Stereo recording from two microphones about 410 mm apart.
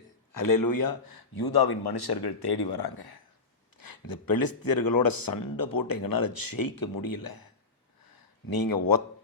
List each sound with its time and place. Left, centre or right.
0.3 s speech: left